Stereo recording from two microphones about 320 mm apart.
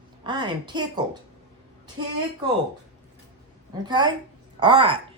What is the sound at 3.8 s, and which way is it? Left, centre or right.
Speech, centre.